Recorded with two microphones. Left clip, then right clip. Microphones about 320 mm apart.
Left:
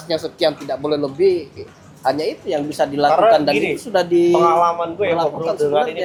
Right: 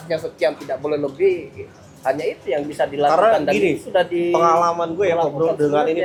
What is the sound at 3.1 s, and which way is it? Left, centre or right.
Speech, right.